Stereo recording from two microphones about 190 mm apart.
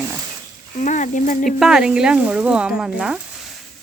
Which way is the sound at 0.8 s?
40° left (ahead or behind).